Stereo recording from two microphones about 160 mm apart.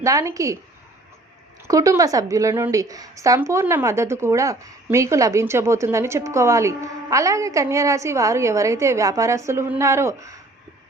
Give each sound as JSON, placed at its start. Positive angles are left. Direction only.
{"t": 0.0, "sound": "a woman's voice", "side_deg": -20}
{"t": 1.6, "sound": "a woman's voice", "side_deg": -20}